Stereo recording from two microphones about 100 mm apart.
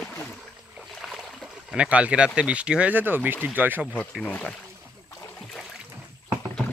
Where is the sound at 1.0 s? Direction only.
Centre (ahead or behind); by 3.8 s 20° right (ahead or behind).